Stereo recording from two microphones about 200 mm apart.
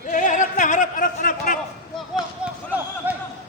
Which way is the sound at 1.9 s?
Centre (ahead or behind).